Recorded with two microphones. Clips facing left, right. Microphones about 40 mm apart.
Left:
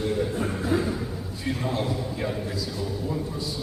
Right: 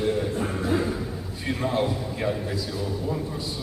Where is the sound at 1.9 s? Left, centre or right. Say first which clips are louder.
Right 1 dB; centre.